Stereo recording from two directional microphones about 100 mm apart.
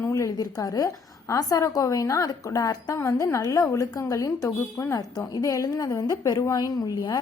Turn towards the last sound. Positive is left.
turn(degrees=40)  # may be behind; listen again after turning